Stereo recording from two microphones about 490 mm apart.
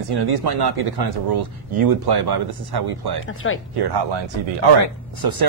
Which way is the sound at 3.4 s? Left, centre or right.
Left.